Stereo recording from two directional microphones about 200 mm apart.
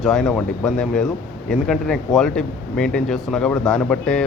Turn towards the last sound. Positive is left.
turn(degrees=5)  # may be behind; listen again after turning